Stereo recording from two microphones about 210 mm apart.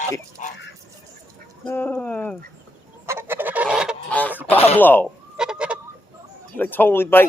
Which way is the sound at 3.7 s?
Centre (ahead or behind).